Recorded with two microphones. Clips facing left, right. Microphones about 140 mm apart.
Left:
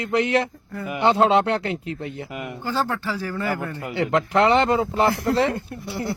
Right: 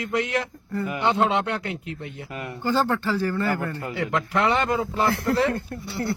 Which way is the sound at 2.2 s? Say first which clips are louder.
Left 2 dB; 20° left (ahead or behind).